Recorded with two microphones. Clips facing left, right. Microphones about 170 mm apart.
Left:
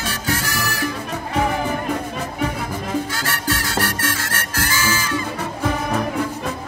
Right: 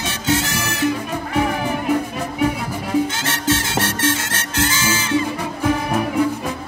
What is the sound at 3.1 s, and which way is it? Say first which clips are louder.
Music: right 4 dB; 20° right (ahead or behind).